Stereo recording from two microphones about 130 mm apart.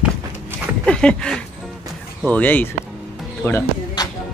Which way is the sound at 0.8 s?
5° left (ahead or behind).